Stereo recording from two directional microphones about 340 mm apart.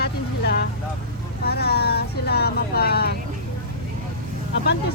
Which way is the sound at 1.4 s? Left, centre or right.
Left.